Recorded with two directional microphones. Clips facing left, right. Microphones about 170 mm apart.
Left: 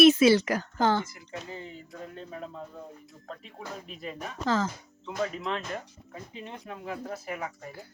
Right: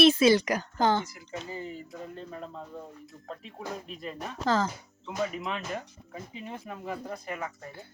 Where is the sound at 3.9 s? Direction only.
5° left (ahead or behind).